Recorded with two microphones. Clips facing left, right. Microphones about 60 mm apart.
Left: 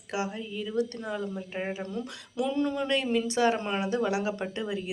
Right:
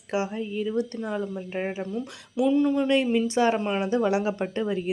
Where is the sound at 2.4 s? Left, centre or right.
Centre.